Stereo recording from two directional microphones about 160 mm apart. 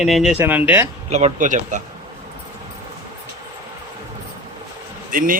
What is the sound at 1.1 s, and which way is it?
Speech, 45° right (ahead or behind).